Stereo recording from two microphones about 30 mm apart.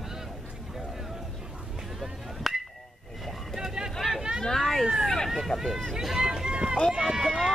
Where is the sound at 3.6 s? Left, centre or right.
Centre.